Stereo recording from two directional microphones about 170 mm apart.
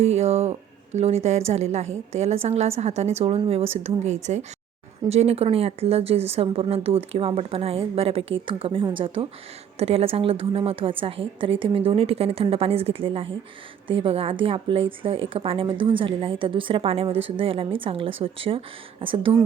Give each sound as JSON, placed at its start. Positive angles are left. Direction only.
{"t": 0.0, "sound": "speech", "side_deg": -40}